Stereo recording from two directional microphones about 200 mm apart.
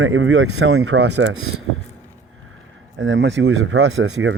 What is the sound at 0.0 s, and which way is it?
Speech, 85° right.